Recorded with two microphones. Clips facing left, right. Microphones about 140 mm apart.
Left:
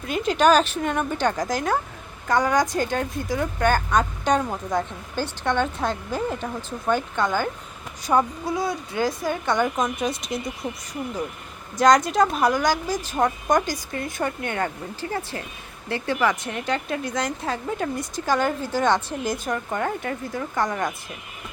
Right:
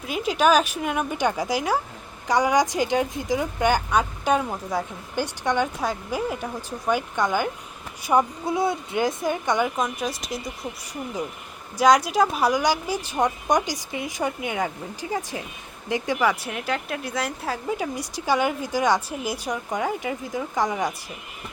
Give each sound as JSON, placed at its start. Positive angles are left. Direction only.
{"t": 0.0, "sound": "speech", "side_deg": -5}
{"t": 8.4, "sound": "speech", "side_deg": -25}
{"t": 9.6, "sound": "speech", "side_deg": 0}
{"t": 11.8, "sound": "speech", "side_deg": -5}